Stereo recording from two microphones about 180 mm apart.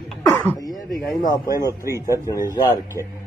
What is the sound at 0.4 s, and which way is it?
Throat clearing, 10° left (ahead or behind).